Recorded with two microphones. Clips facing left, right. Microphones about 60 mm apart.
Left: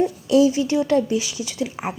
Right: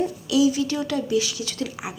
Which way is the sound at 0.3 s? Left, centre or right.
Left.